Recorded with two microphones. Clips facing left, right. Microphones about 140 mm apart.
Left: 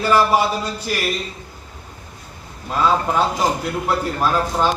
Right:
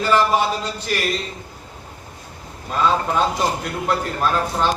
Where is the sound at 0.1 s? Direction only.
10° left (ahead or behind).